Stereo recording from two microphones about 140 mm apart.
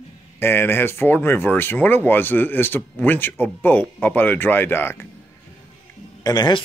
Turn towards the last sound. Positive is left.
turn(degrees=30)  # may be behind; listen again after turning